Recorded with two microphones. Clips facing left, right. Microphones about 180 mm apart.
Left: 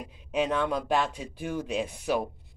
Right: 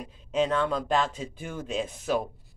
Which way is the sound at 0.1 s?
10° left (ahead or behind).